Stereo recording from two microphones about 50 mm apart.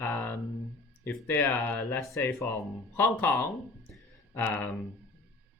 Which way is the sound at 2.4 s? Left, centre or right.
Left.